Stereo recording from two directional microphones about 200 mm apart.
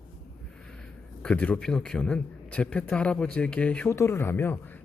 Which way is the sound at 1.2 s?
5° left (ahead or behind).